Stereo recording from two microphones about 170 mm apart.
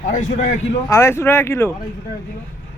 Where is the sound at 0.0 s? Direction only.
50° left (ahead or behind).